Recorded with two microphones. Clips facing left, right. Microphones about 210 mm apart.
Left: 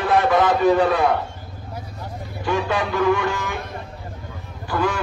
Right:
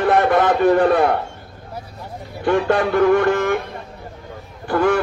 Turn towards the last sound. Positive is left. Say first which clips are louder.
# right 6 dB
turn(degrees=-60)  # may be behind; listen again after turning